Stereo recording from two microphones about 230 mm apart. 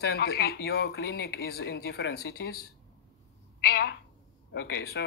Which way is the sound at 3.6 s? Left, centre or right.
Left.